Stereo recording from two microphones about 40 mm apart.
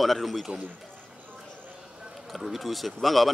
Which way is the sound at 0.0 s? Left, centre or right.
Centre.